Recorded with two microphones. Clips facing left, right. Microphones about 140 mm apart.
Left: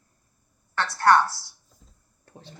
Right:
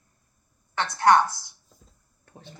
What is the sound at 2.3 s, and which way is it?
Speech, 35° left (ahead or behind).